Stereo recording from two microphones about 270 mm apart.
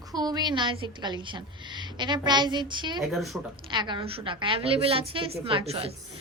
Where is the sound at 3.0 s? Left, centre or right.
Centre.